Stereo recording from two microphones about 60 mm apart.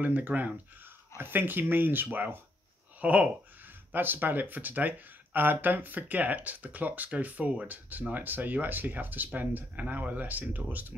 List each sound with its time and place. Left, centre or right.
0.0 s speech: right
3.0 s speech: right
3.9 s speech: right